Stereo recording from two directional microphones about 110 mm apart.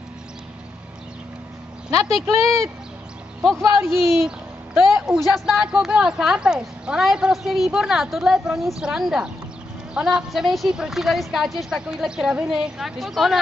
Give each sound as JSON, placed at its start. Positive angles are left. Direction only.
{"t": 2.2, "sound": "speech", "side_deg": -30}
{"t": 4.7, "sound": "a woman's voice", "side_deg": -5}